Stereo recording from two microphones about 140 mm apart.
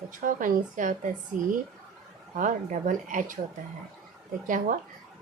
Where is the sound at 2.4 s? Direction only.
70° right (ahead or behind).